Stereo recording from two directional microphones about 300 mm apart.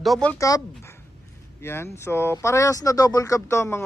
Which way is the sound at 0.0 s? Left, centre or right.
Centre.